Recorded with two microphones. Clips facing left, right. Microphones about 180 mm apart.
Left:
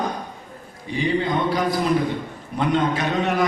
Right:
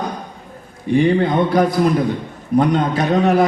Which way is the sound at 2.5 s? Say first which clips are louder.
Right 5 dB; 40° right (ahead or behind).